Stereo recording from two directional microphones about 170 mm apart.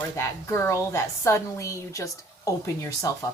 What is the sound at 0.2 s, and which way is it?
A woman's voice, 15° left (ahead or behind).